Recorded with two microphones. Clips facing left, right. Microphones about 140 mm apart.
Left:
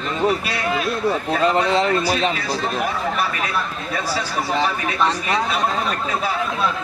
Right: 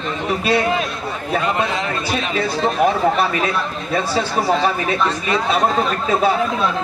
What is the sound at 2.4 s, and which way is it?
Speech, 25° right (ahead or behind).